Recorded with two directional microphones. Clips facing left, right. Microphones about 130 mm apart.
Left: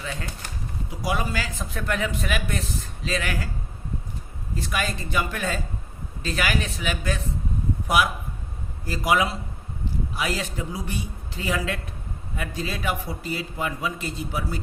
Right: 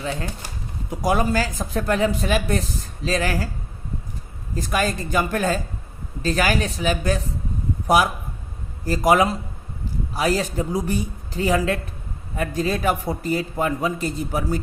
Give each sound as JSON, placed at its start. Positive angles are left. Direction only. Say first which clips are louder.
{"t": 0.0, "sound": "a man's voice", "louder": "right 6 dB", "side_deg": -35}
{"t": 0.9, "sound": "a man's voice", "louder": "right 7 dB", "side_deg": -45}
{"t": 4.5, "sound": "a man's voice", "louder": "right 5 dB", "side_deg": -40}